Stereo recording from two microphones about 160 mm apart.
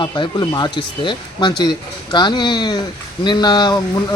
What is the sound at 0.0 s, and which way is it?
A man's voice, 25° left (ahead or behind).